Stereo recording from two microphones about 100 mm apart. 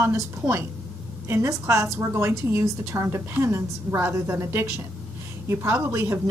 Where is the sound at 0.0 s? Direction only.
25° right (ahead or behind).